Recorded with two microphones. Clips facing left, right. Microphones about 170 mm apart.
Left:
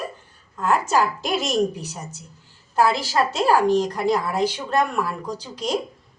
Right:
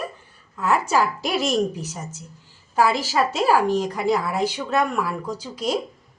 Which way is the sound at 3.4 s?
5° right (ahead or behind).